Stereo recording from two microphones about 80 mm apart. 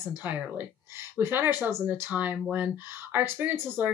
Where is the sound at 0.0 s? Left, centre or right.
Right.